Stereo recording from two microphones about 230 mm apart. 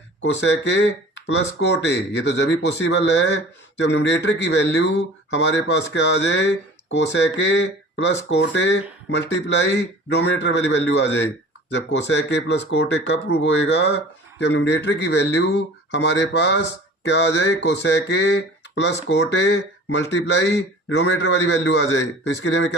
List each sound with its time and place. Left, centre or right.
0.2 s speech: left